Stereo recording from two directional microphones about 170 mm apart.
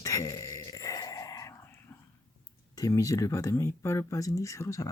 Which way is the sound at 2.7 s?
20° left (ahead or behind).